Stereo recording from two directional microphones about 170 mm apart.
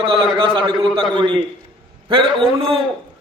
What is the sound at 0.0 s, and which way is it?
A man's voice, 30° right (ahead or behind).